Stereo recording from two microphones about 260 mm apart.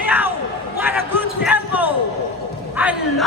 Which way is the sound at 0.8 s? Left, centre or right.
Centre.